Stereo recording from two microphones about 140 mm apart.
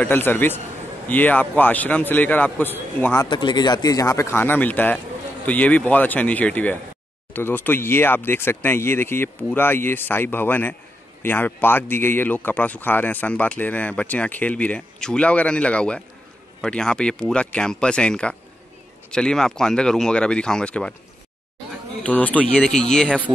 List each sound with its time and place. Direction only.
0.0 s speech: 15° left (ahead or behind)
3.3 s speech: 30° left (ahead or behind); by 20.9 s 5° left (ahead or behind)
22.0 s speech: 10° left (ahead or behind)